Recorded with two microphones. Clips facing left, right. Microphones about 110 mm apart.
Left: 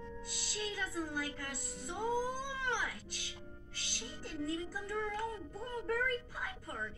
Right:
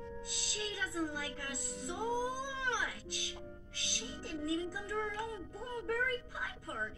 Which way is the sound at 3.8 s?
20° right (ahead or behind).